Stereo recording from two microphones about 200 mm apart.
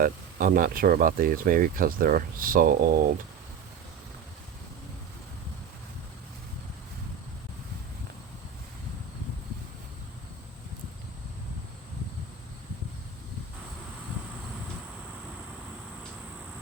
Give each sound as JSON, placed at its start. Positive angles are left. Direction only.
{"t": 0.0, "sound": "speech", "side_deg": -45}